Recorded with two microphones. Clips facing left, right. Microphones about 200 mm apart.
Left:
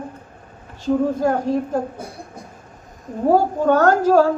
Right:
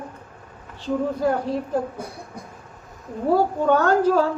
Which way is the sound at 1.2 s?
45° left (ahead or behind).